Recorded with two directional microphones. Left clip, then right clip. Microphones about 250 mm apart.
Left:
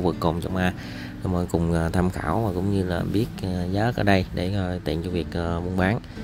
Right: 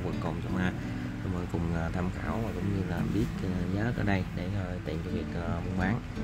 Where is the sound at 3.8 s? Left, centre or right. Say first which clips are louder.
Left 12 dB; left.